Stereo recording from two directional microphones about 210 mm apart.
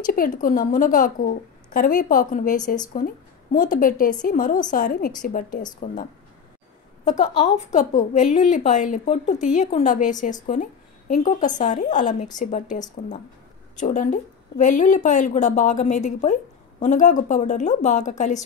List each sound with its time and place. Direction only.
0.0 s a woman's voice: 40° left (ahead or behind)
7.1 s a woman's voice: 35° left (ahead or behind)